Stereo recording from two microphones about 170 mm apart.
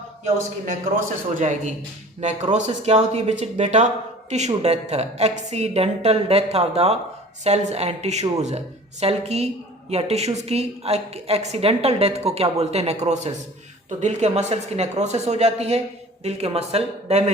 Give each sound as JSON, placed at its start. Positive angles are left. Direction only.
{"t": 0.3, "sound": "a man's voice", "side_deg": -45}